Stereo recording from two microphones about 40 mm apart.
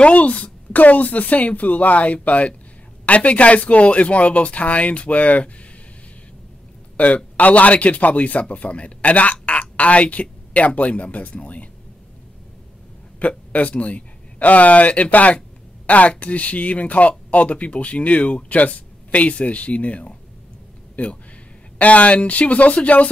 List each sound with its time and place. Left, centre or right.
0.0 s speech: left
7.0 s a man's voice: left
13.5 s speech: left